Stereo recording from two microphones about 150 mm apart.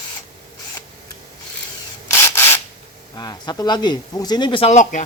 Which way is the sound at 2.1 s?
15° left (ahead or behind).